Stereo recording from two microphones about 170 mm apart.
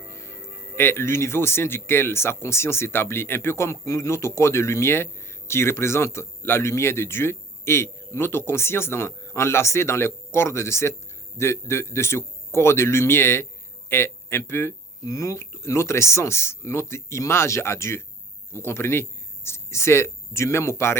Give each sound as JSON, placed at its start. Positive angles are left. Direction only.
{"t": 0.1, "sound": "music", "side_deg": 15}
{"t": 0.8, "sound": "speech", "side_deg": 15}